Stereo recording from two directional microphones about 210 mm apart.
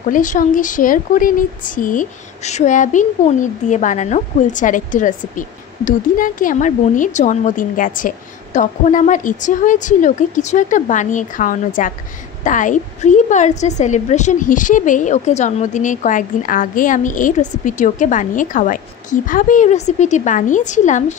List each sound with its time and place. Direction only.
0.1 s a woman's voice: 40° left (ahead or behind)